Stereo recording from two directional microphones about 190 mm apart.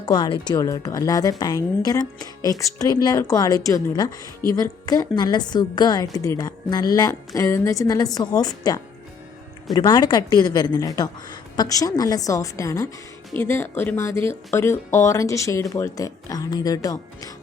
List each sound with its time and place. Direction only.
0.0 s a woman's voice: 25° left (ahead or behind)